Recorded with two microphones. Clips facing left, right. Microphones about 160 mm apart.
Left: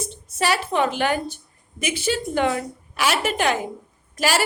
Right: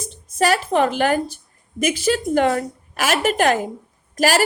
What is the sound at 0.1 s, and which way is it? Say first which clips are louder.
A woman's voice: right 6 dB; 45° right (ahead or behind).